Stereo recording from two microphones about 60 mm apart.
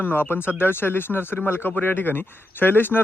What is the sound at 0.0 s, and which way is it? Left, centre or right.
Speech, left.